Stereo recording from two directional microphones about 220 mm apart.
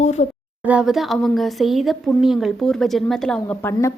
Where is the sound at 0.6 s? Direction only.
5° right (ahead or behind); by 3.9 s 10° left (ahead or behind).